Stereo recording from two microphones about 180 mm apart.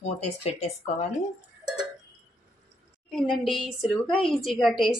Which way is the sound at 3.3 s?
Centre (ahead or behind).